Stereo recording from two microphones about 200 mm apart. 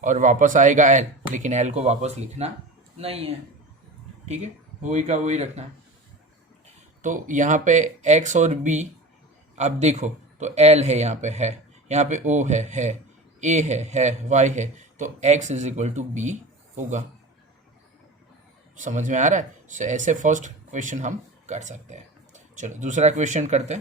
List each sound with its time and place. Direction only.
0.0 s speech: 40° right (ahead or behind)
4.8 s speech: 35° right (ahead or behind)
7.0 s speech: 40° right (ahead or behind)
18.8 s speech: 40° right (ahead or behind)